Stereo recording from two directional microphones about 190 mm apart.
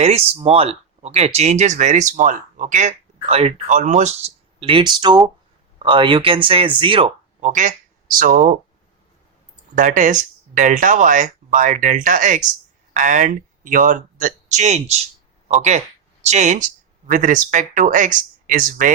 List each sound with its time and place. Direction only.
0.0 s speech: 30° right (ahead or behind)
7.4 s speech: 40° right (ahead or behind)
9.7 s speech: 40° right (ahead or behind)